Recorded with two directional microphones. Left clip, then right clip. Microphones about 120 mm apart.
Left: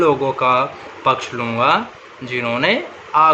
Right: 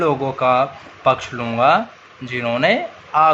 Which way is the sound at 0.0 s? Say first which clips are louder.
Left 2 dB; 30° right (ahead or behind).